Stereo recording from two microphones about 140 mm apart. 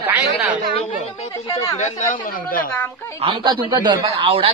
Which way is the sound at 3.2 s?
40° right (ahead or behind).